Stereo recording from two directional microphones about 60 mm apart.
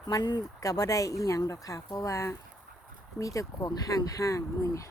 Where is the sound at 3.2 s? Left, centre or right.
Left.